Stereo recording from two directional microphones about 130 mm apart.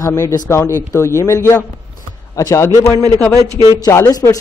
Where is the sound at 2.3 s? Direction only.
25° left (ahead or behind).